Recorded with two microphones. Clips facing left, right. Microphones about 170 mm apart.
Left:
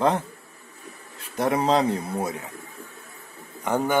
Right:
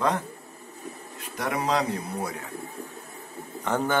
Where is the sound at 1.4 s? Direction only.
30° left (ahead or behind).